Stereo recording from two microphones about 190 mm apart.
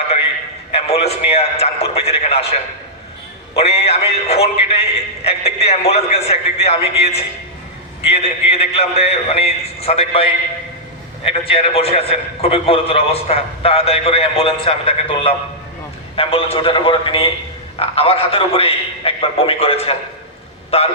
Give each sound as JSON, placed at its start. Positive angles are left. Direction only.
{"t": 0.7, "sound": "a man's voice", "side_deg": 30}